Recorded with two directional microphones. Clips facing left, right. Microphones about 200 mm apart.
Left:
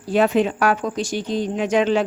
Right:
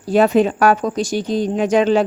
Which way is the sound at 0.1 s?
40° right (ahead or behind).